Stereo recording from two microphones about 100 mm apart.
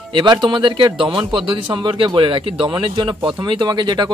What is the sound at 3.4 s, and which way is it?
Speech, 45° right (ahead or behind).